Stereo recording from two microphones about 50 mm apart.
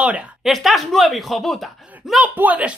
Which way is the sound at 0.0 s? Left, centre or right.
Right.